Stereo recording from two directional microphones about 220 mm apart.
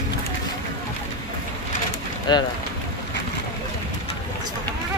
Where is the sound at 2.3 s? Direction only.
20° left (ahead or behind).